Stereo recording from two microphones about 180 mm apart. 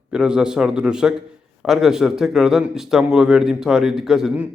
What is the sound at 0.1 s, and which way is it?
Speech, 5° right (ahead or behind).